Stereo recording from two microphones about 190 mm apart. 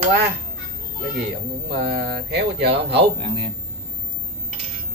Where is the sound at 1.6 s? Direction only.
55° right (ahead or behind).